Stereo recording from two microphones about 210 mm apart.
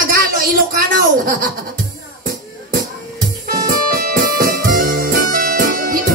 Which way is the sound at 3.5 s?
45° right (ahead or behind).